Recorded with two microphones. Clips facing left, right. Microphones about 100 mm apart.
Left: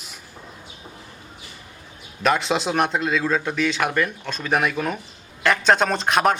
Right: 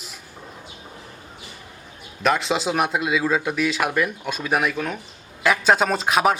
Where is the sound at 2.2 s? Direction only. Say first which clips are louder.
Even; centre (ahead or behind).